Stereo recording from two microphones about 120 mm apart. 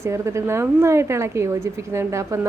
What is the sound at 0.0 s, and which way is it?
Speech, 25° right (ahead or behind).